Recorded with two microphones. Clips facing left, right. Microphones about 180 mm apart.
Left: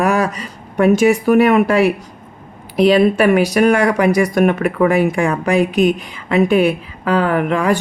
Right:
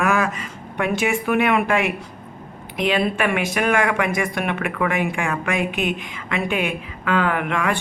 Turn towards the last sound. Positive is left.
turn(degrees=35)  # may be behind; listen again after turning